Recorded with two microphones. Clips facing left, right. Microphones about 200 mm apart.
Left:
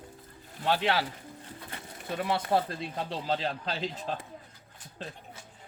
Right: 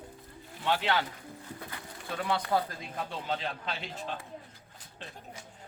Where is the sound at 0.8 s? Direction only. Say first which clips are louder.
Left 2 dB; 30° left (ahead or behind).